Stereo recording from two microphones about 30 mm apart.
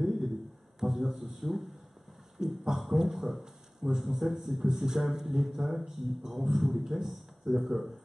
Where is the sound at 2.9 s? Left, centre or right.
Centre.